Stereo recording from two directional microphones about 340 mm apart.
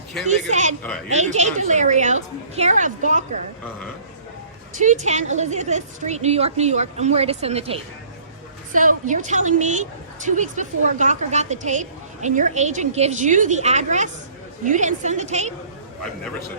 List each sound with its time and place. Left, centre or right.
0.3 s a woman's voice: right
4.8 s a woman's voice: right